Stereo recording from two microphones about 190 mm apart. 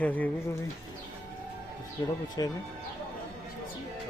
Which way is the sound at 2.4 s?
20° left (ahead or behind).